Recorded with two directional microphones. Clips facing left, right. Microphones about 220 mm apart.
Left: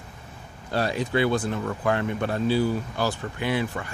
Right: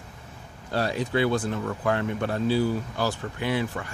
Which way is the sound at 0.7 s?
15° left (ahead or behind).